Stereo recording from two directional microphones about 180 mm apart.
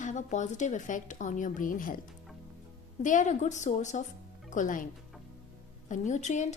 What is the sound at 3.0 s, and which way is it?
A woman's voice, 45° left (ahead or behind).